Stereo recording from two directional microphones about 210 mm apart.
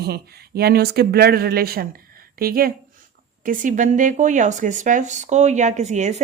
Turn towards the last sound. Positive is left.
turn(degrees=-35)  # may be behind; listen again after turning